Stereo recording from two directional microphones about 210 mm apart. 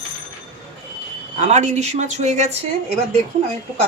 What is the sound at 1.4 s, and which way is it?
Speech, 35° right (ahead or behind).